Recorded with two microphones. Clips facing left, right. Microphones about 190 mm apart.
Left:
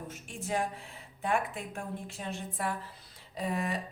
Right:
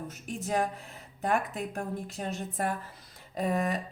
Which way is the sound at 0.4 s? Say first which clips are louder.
Right 3 dB; 40° right (ahead or behind).